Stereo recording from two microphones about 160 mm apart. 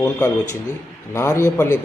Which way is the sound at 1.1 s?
15° left (ahead or behind).